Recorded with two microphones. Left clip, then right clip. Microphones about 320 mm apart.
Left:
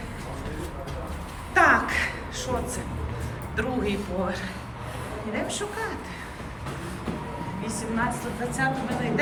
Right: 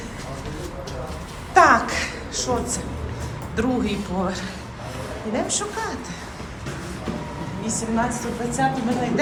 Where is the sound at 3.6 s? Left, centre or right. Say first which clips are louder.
Right 5 dB; centre.